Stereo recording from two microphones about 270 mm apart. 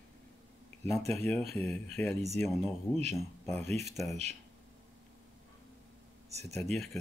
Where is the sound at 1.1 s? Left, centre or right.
Centre.